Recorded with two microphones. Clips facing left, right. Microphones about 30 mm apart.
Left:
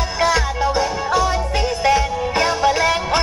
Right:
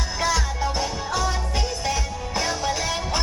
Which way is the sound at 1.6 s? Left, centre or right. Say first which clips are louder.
Left 10 dB; left.